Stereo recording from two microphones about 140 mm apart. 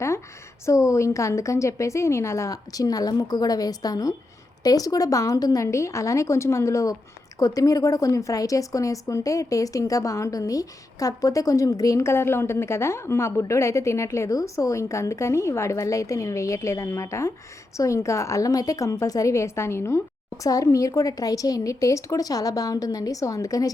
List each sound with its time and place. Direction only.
0.6 s a woman's voice: 20° left (ahead or behind)